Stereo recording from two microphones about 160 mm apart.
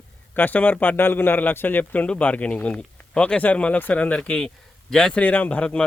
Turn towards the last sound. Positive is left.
turn(degrees=5)  # may be behind; listen again after turning